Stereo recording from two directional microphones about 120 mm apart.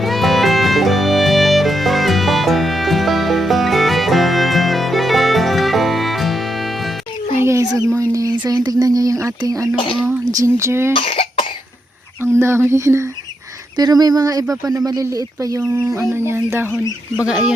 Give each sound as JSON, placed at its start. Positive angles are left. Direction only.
{"t": 0.0, "sound": "music", "side_deg": 0}
{"t": 7.3, "sound": "chicken", "side_deg": -25}
{"t": 8.1, "sound": "a sound", "side_deg": -30}
{"t": 9.7, "sound": "speech", "side_deg": 45}
{"t": 10.3, "sound": "speech", "side_deg": -25}
{"t": 10.9, "sound": "cough", "side_deg": 50}
{"t": 12.2, "sound": "a sound", "side_deg": -20}
{"t": 13.7, "sound": "speech", "side_deg": -35}